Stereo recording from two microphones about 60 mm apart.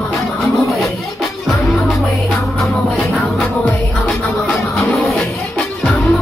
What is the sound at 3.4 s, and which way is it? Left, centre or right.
Music, centre.